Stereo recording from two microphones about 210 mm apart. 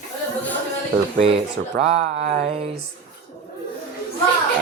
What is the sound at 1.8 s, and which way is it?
Music, 30° right (ahead or behind).